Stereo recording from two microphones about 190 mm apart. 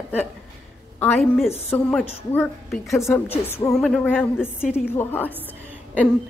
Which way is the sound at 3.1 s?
10° left (ahead or behind).